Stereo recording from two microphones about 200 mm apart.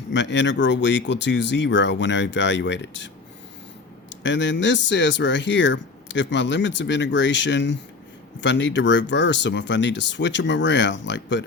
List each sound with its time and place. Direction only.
0.1 s speech: 65° left (ahead or behind)
4.1 s speech: 65° left (ahead or behind)